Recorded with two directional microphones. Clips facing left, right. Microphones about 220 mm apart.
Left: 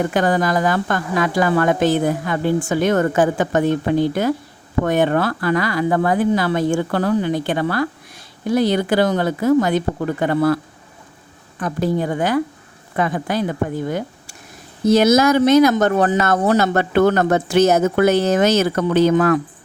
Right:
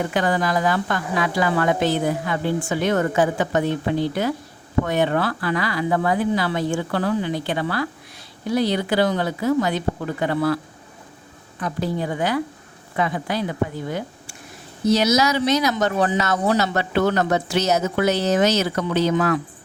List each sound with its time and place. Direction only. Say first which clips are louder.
0.0 s speech: left 4 dB; 45° left (ahead or behind)
11.6 s speech: left 5 dB; 50° left (ahead or behind)